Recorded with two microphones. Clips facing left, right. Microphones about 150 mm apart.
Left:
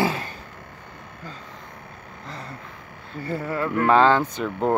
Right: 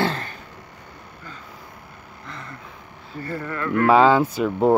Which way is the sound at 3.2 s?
25° left (ahead or behind).